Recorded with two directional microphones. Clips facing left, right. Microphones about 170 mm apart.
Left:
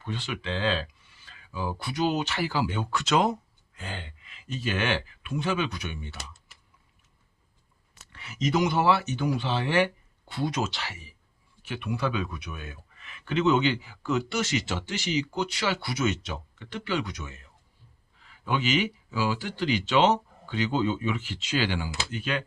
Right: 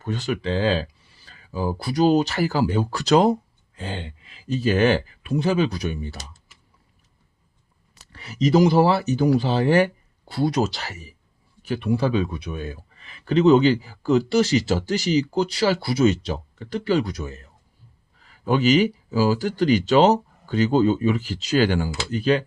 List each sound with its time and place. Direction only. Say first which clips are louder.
0.0 s speech: right 8 dB; 40° right (ahead or behind)
7.9 s speech: right 9 dB; 35° right (ahead or behind)